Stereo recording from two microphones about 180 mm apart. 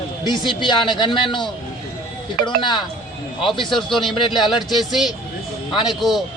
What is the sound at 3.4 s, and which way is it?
Speech, centre (ahead or behind).